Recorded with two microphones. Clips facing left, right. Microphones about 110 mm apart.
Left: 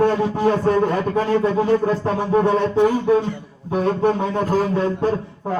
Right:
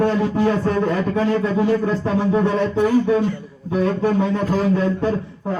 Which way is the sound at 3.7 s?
45° left (ahead or behind).